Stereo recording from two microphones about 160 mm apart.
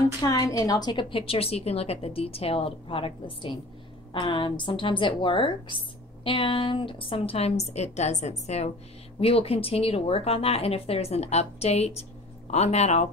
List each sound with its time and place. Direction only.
0.2 s speech: 20° left (ahead or behind); by 13.1 s 45° left (ahead or behind)